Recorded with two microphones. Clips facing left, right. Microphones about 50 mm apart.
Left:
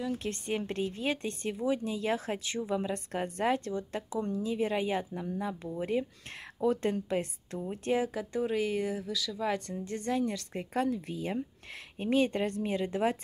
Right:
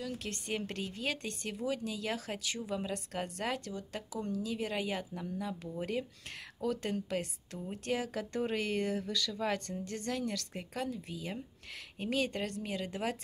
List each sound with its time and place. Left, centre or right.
0.0 s speech: left
8.1 s speech: centre
9.5 s speech: centre